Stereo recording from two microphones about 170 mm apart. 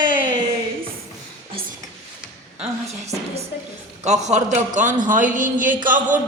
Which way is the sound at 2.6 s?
40° right (ahead or behind).